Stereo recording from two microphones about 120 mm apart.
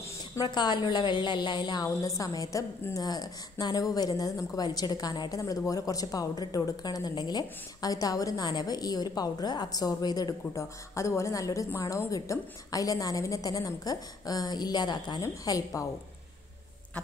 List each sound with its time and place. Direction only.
0.0 s a woman's voice: 35° left (ahead or behind)